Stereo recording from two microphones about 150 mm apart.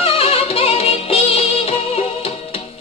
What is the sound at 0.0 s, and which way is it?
Music, 40° left (ahead or behind).